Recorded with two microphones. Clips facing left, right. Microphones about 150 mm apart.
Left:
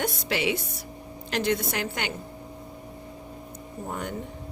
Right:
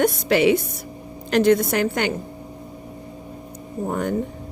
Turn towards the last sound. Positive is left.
turn(degrees=-55)  # may be behind; listen again after turning